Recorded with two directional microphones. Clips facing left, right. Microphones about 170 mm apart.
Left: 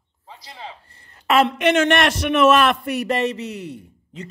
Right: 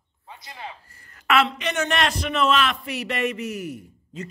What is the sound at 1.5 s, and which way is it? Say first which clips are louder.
A man's voice: left 9 dB; 65° left (ahead or behind).